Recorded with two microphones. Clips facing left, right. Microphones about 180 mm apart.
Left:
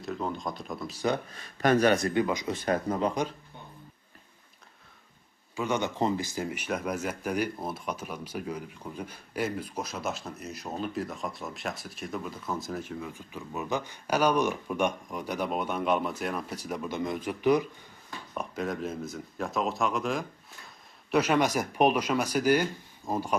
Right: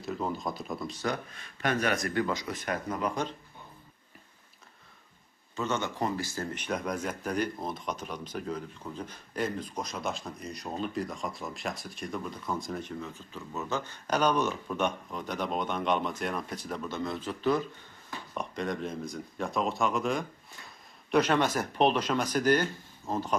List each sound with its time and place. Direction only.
0.0 s speech: centre (ahead or behind)
1.3 s speech: 35° left (ahead or behind)
5.5 s speech: 15° left (ahead or behind)
18.3 s speech: 5° left (ahead or behind)